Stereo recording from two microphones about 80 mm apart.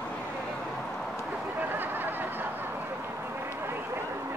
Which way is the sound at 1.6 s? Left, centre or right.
Right.